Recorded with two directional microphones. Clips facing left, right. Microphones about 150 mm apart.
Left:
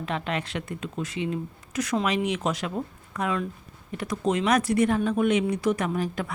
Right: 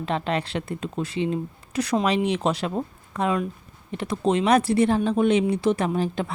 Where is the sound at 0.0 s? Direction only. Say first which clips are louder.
Right 4 dB; 30° right (ahead or behind).